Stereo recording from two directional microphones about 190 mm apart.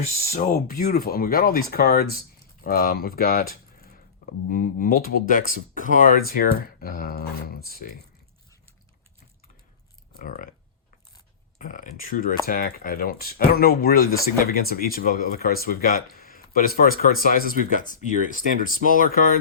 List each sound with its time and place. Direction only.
0.3 s speech: 35° left (ahead or behind)
0.8 s speech: 50° left (ahead or behind)
10.2 s speech: 45° left (ahead or behind)
11.6 s speech: 45° left (ahead or behind)